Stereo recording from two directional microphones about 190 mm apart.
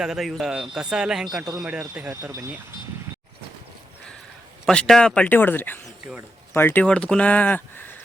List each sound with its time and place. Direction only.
0.0 s a man's voice: centre (ahead or behind)
4.6 s speech: 5° left (ahead or behind)